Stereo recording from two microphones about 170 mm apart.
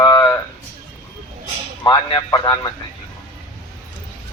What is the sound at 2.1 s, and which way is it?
Speech, 25° left (ahead or behind).